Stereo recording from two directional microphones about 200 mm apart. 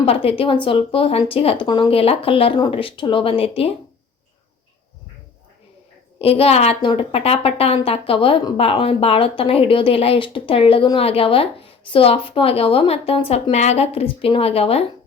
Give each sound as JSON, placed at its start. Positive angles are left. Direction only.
{"t": 0.0, "sound": "a woman's voice", "side_deg": 30}
{"t": 6.1, "sound": "a woman's voice", "side_deg": 30}